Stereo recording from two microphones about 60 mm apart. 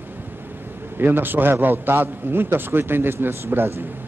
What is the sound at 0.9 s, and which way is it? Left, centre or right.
A man's voice, right.